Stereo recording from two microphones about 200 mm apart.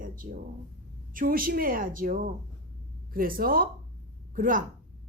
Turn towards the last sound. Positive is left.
turn(degrees=-45)  # may be behind; listen again after turning